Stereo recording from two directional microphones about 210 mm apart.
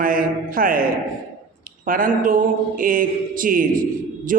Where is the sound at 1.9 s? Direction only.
40° right (ahead or behind).